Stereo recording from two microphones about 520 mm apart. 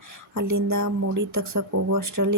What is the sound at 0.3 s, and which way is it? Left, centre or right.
Speech, right.